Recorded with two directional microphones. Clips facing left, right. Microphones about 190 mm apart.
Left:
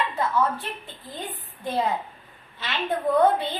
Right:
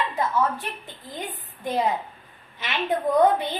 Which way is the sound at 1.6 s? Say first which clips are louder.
Right 1 dB; 15° right (ahead or behind).